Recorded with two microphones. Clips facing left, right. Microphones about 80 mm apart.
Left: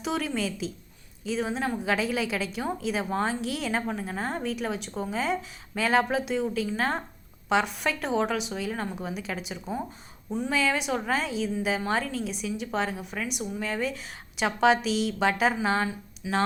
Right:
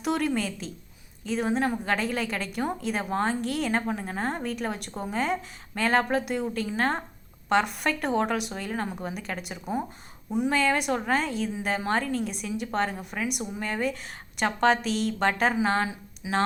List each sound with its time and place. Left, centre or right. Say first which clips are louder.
0.0 s a woman's voice: right 2 dB; centre
10.2 s a woman's voice: right 4 dB; centre
10.5 s a woman's voice: even; centre
16.2 s speech: even; centre